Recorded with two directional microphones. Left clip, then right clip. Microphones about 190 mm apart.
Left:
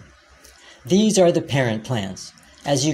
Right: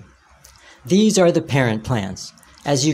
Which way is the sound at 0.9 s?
25° right (ahead or behind).